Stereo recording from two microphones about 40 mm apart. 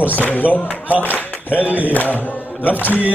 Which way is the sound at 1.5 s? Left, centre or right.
Right.